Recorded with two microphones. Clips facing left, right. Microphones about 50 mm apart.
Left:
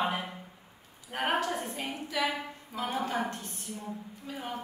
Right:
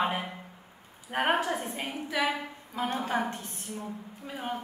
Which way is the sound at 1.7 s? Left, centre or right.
Right.